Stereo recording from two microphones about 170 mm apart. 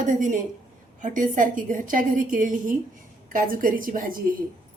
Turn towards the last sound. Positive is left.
turn(degrees=-55)  # may be behind; listen again after turning